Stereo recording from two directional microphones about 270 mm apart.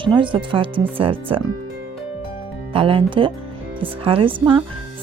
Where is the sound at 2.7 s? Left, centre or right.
Centre.